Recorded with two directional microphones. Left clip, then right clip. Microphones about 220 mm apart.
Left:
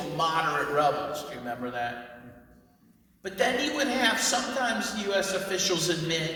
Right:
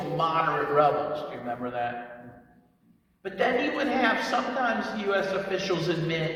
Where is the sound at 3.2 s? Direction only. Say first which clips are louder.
Right 1 dB; 15° left (ahead or behind).